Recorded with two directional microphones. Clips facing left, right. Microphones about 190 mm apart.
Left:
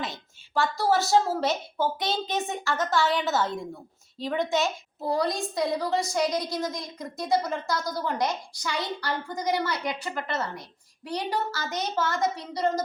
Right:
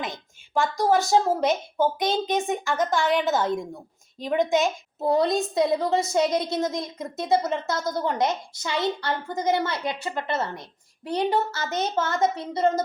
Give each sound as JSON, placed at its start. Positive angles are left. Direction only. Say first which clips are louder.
{"t": 0.0, "sound": "a woman's voice", "louder": "right 2 dB", "side_deg": -15}